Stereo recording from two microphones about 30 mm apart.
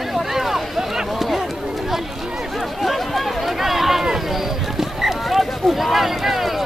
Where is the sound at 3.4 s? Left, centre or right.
Centre.